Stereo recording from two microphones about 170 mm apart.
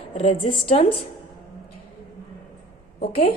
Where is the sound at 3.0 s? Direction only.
65° left (ahead or behind).